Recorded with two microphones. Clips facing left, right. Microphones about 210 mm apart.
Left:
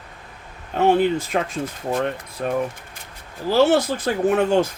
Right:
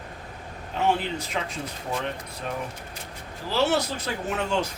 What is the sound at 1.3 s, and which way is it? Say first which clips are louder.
Speech: left 7 dB; 50° left (ahead or behind).